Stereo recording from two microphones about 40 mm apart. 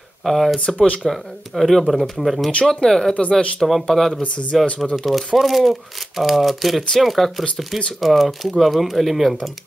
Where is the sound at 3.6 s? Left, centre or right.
Centre.